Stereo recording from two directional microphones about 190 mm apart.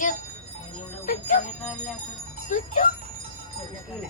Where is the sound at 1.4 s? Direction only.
40° left (ahead or behind).